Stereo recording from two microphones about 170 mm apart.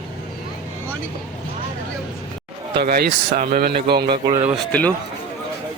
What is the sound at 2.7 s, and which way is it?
Speech, 65° right (ahead or behind).